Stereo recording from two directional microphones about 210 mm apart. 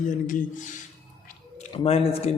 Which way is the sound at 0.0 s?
40° left (ahead or behind).